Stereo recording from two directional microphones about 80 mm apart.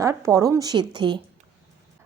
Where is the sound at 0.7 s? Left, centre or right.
Right.